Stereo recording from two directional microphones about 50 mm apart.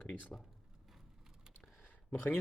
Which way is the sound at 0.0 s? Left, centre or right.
Left.